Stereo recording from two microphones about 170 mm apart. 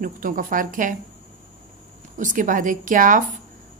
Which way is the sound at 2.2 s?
50° right (ahead or behind).